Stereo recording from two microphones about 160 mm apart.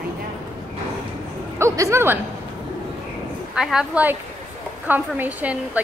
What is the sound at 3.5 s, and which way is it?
A woman's voice, 5° right (ahead or behind).